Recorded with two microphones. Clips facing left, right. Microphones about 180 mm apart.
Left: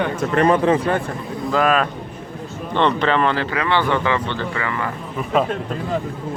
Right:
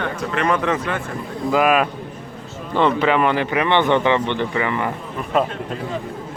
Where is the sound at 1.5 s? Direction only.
10° right (ahead or behind).